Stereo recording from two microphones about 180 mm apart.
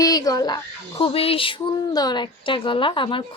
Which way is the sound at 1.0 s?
30° left (ahead or behind).